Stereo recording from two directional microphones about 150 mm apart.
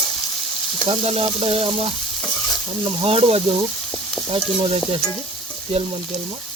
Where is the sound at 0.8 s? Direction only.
35° right (ahead or behind).